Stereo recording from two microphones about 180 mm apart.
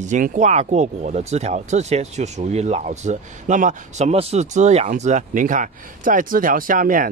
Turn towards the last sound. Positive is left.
turn(degrees=-50)  # may be behind; listen again after turning